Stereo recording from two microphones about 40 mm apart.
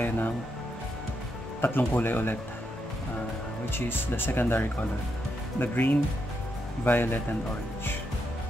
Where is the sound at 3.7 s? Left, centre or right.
Left.